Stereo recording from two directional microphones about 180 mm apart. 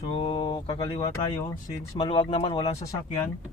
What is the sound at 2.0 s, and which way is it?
Speech, 30° left (ahead or behind).